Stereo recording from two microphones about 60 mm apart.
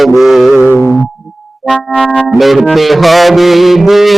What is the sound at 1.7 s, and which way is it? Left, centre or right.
Music, centre.